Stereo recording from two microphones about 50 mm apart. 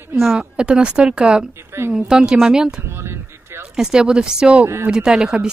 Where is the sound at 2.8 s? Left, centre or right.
Right.